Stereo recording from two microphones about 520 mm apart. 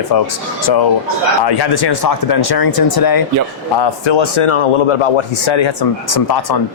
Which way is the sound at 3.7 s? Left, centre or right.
Left.